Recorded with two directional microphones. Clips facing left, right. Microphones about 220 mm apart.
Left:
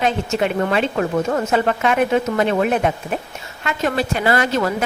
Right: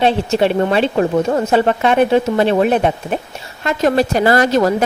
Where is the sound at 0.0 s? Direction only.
30° right (ahead or behind).